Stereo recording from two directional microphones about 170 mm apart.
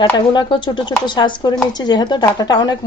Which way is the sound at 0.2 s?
30° left (ahead or behind).